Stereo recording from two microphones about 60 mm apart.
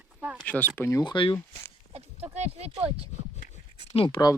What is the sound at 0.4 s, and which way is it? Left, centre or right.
Speech, left.